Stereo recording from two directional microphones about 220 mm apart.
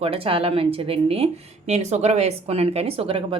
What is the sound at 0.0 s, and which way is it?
Speech, 25° right (ahead or behind).